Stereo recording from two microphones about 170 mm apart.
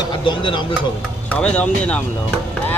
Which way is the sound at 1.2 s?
10° left (ahead or behind).